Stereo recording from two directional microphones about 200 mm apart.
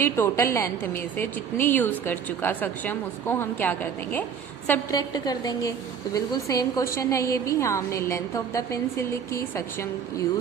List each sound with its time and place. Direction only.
0.0 s a woman's voice: 10° left (ahead or behind)